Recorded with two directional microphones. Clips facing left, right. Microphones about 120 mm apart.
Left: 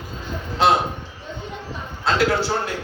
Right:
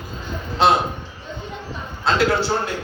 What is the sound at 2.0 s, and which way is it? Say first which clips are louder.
Speech: right 1 dB; 25° right (ahead or behind).